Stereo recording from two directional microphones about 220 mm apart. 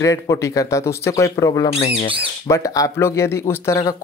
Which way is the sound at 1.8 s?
30° left (ahead or behind).